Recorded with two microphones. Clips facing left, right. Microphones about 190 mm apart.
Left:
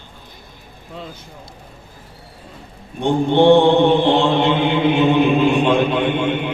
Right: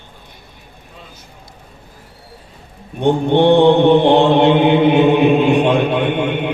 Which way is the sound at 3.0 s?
60° right (ahead or behind).